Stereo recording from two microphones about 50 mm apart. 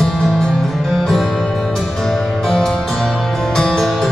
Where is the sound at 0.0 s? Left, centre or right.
Centre.